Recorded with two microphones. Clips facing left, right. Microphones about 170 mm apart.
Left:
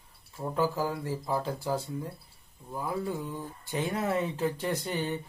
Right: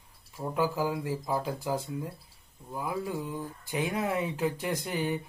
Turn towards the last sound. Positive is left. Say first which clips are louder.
# even
turn(degrees=-10)  # may be behind; listen again after turning